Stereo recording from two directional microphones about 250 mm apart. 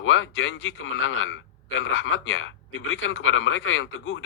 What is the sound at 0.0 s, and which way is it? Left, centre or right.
A man's voice, left.